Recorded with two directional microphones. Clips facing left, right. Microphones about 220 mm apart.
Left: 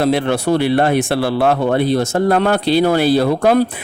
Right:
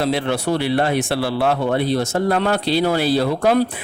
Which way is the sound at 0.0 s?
50° left (ahead or behind).